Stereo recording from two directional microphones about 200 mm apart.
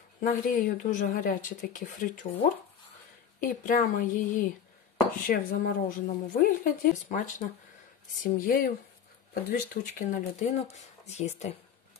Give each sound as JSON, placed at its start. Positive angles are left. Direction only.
{"t": 0.2, "sound": "speech", "side_deg": 40}
{"t": 3.6, "sound": "speech", "side_deg": 45}